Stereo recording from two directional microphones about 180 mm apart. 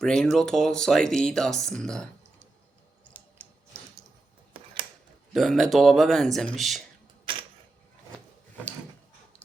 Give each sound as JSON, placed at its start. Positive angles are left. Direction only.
{"t": 0.0, "sound": "speech", "side_deg": 5}
{"t": 5.3, "sound": "speech", "side_deg": 0}
{"t": 7.3, "sound": "camera", "side_deg": -30}